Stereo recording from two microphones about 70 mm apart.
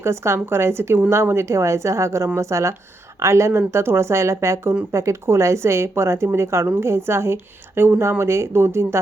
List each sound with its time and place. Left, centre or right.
0.0 s a woman's voice: right